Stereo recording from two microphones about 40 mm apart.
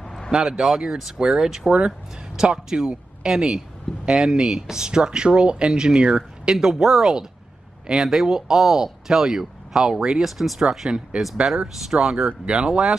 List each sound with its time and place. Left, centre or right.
0.3 s speech: centre